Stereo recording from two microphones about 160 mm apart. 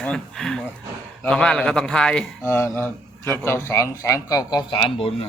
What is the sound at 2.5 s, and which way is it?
A man's voice, 15° left (ahead or behind).